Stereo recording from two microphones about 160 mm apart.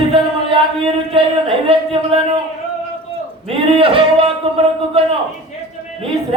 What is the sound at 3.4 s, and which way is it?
Speech, 35° right (ahead or behind).